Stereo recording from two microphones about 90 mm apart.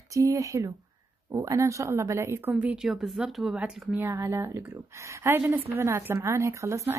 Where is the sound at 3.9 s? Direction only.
25° right (ahead or behind).